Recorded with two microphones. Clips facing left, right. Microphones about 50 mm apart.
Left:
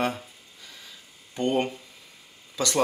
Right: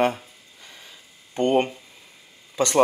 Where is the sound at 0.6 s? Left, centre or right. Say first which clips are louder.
Right 1 dB; right.